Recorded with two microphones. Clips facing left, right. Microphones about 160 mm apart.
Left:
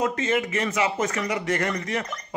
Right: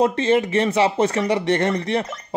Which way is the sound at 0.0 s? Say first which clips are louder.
Right 6 dB; 30° right (ahead or behind).